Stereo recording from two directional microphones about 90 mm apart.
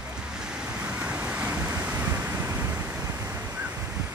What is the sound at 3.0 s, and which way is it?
Waves, 35° right (ahead or behind).